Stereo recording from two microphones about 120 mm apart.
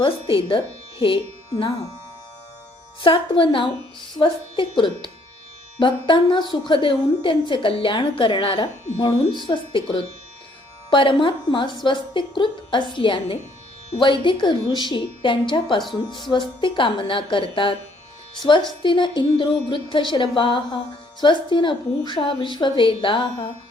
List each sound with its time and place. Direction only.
0.0 s speech: 45° left (ahead or behind)
3.0 s a woman's voice: 45° left (ahead or behind)
18.8 s speech: 40° left (ahead or behind)